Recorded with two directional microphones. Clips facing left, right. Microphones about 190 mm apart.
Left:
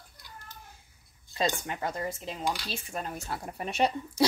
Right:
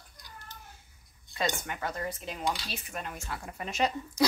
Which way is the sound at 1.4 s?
30° left (ahead or behind).